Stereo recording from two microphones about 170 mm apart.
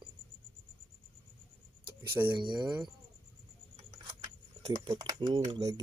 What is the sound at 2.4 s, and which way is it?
Speech, 25° right (ahead or behind).